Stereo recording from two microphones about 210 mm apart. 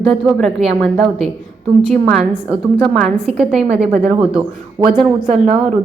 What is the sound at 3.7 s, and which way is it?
Speech, 30° right (ahead or behind).